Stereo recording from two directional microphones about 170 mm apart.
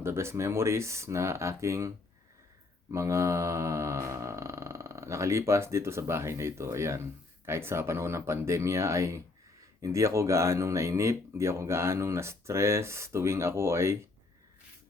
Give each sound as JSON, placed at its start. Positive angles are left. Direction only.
{"t": 0.0, "sound": "speech", "side_deg": -15}
{"t": 2.9, "sound": "mantra", "side_deg": -15}
{"t": 7.4, "sound": "speech", "side_deg": -15}